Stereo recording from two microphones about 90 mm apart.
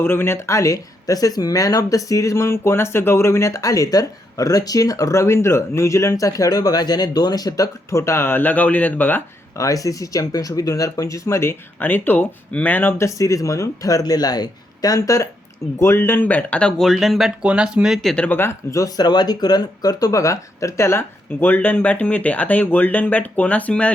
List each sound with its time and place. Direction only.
0.0 s speech: 25° left (ahead or behind)
9.6 s speech: 40° left (ahead or behind); by 12.9 s 20° left (ahead or behind)
13.0 s speech: 35° left (ahead or behind)
15.8 s speech: 25° left (ahead or behind); by 18.1 s 5° right (ahead or behind)
18.3 s speech: 25° left (ahead or behind)
18.7 s speech: 40° left (ahead or behind)
21.4 s speech: 20° left (ahead or behind)